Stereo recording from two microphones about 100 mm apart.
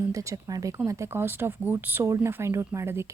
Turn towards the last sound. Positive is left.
turn(degrees=-30)  # may be behind; listen again after turning